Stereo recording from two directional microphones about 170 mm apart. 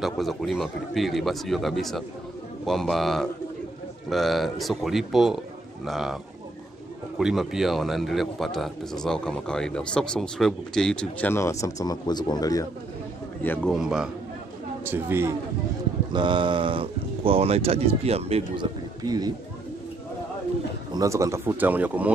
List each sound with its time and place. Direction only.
0.0 s a man's voice: centre (ahead or behind)
7.2 s a man's voice: 5° right (ahead or behind); by 12.6 s 20° left (ahead or behind)
13.4 s a man's voice: 10° left (ahead or behind)
13.7 s a man's voice: 5° right (ahead or behind)
16.1 s speech: 30° right (ahead or behind)
19.0 s speech: 25° right (ahead or behind)
20.9 s speech: 20° right (ahead or behind)